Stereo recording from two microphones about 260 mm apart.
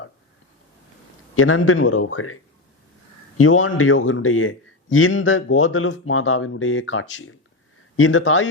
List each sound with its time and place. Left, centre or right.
1.4 s a man's voice: left